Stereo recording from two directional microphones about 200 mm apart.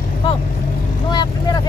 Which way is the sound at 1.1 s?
20° left (ahead or behind).